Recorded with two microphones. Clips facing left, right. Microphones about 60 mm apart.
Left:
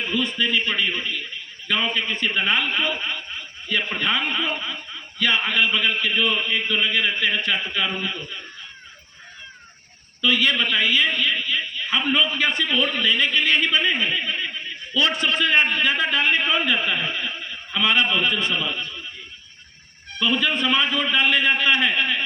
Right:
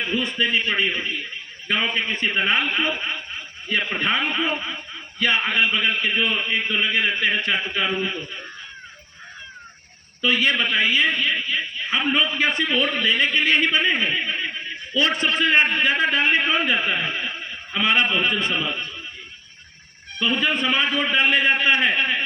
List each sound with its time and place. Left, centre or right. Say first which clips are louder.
0.3 s a man's voice: right 3 dB; right
10.2 s a man's voice: even; right
15.1 s a man's voice: right 1 dB; right
15.6 s a man's voice: right 1 dB; right
18.2 s a man's voice: even; right
18.6 s a man's voice: even; right
20.2 s a man's voice: even; right
20.5 s a man's voice: even; centre; by 22.2 s right